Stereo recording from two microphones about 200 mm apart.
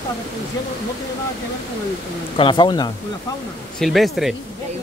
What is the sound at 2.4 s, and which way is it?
Speech, 25° left (ahead or behind).